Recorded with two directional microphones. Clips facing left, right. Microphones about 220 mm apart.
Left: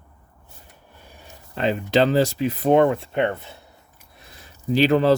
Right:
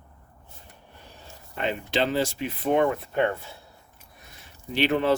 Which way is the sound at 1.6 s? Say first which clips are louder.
Left 7 dB; 40° left (ahead or behind).